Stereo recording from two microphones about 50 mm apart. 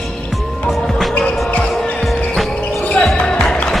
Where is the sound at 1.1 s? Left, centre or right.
Left.